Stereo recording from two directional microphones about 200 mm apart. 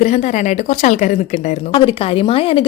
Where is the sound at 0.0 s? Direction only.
35° left (ahead or behind).